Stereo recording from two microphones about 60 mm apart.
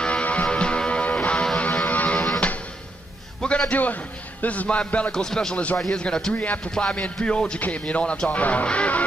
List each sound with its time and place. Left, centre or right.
0.0 s music: left
3.3 s a man's voice: centre
5.1 s a man's voice: centre
6.3 s speech: left
6.6 s a man's voice: centre